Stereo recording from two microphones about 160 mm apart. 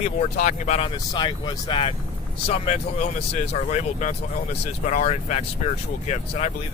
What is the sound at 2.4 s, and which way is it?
Speech, 40° left (ahead or behind).